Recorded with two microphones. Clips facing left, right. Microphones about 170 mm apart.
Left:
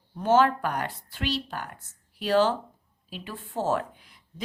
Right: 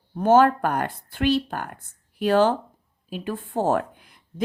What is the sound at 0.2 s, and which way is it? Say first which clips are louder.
A woman's voice: right 5 dB; 50° right (ahead or behind).